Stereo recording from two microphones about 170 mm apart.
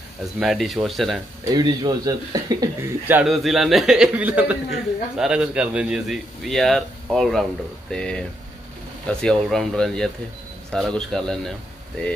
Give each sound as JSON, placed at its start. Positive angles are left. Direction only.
{"t": 0.4, "sound": "a man's voice", "side_deg": 0}
{"t": 1.5, "sound": "speech", "side_deg": -25}
{"t": 3.1, "sound": "a man's voice", "side_deg": -5}